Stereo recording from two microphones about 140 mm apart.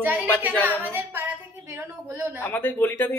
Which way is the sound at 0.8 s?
15° right (ahead or behind).